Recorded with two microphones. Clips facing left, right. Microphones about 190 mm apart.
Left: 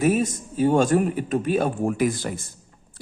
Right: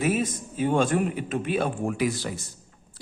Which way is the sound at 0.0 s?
40° left (ahead or behind).